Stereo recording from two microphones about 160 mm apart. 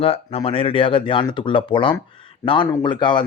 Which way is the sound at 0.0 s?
35° left (ahead or behind).